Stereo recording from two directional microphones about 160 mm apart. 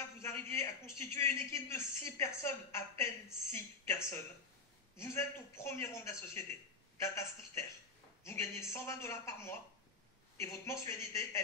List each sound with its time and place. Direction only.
0.2 s a man's voice: 15° left (ahead or behind)